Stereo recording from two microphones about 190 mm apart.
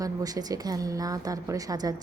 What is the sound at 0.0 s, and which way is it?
A woman's voice, 20° right (ahead or behind).